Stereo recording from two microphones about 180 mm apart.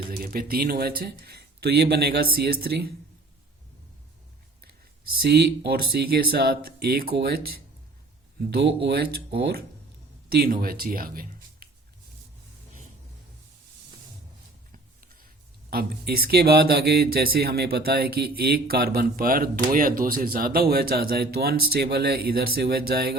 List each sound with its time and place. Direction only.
0.2 s speech: 55° right (ahead or behind)
5.1 s speech: 60° right (ahead or behind)
14.7 s a sound: 50° right (ahead or behind)
15.7 s speech: 55° right (ahead or behind)